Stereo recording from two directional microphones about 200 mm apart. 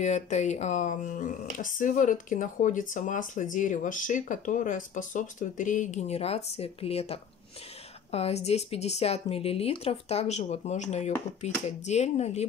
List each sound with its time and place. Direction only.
0.0 s speech: 35° left (ahead or behind)